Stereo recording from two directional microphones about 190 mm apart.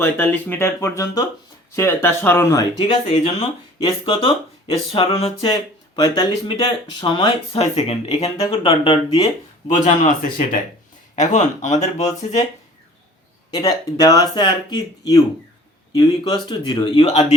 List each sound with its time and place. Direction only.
0.0 s speech: 10° left (ahead or behind); by 9.3 s 25° left (ahead or behind)
9.6 s speech: 40° left (ahead or behind)
13.5 s speech: 20° left (ahead or behind)